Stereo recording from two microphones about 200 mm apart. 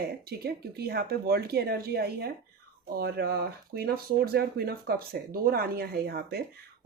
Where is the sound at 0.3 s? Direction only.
50° right (ahead or behind).